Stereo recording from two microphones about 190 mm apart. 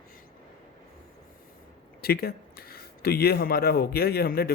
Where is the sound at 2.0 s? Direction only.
55° left (ahead or behind).